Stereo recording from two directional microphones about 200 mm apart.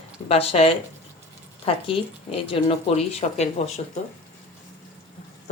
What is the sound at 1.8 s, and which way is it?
Speech, 30° left (ahead or behind).